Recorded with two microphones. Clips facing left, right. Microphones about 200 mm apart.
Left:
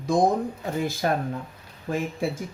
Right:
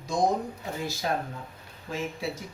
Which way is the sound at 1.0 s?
55° left (ahead or behind).